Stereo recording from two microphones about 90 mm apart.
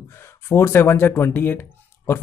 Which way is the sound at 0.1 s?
30° left (ahead or behind).